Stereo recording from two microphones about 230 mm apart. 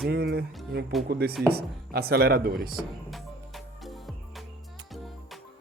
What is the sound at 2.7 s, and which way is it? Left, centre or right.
Speech, centre.